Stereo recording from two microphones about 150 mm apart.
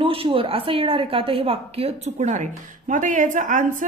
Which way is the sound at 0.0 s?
35° right (ahead or behind).